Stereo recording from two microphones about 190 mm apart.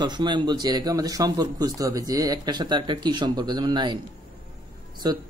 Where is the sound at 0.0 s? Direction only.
25° right (ahead or behind).